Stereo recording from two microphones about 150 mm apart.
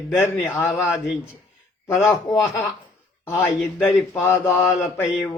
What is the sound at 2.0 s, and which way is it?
Speech, 20° left (ahead or behind).